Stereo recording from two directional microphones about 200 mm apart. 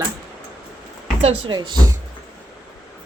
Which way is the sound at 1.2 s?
30° right (ahead or behind).